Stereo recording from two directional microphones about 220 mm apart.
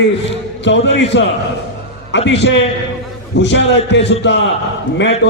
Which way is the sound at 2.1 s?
55° left (ahead or behind).